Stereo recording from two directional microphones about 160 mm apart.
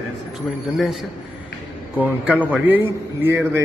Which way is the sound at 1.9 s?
10° right (ahead or behind).